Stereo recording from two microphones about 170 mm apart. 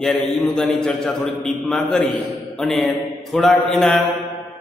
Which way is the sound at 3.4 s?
Centre (ahead or behind).